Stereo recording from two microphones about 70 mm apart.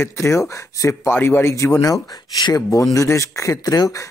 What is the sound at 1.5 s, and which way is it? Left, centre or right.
Speech, left.